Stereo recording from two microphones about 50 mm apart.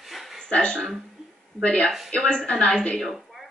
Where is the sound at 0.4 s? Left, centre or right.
Left.